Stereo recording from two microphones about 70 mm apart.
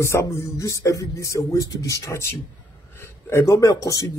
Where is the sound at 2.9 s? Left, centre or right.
Left.